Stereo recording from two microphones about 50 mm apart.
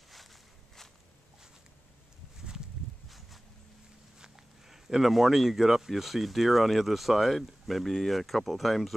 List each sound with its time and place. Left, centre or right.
0.1 s walk: centre
3.1 s a sound: centre
4.2 s speech: centre